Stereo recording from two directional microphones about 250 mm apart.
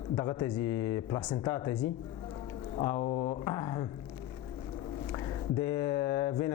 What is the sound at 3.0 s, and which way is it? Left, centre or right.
Speech, centre.